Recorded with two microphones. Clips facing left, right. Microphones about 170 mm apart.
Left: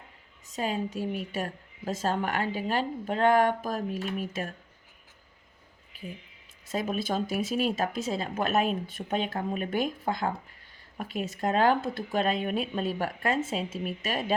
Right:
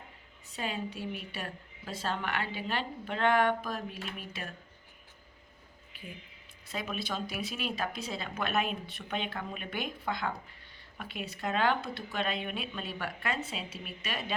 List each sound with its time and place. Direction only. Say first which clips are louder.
0.4 s a woman's voice: left 6 dB; 40° left (ahead or behind)
5.9 s a sound: left 6 dB; 40° left (ahead or behind)
6.7 s a woman's voice: left 7 dB; 45° left (ahead or behind)